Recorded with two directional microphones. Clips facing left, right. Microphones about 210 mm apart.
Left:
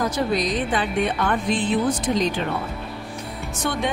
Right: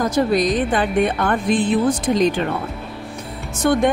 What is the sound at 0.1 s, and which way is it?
A woman's voice, 50° right (ahead or behind).